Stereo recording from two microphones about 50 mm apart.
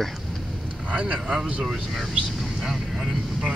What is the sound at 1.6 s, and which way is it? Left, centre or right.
Vehicle, centre.